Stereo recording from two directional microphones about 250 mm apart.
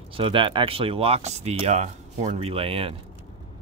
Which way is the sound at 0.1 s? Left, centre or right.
Right.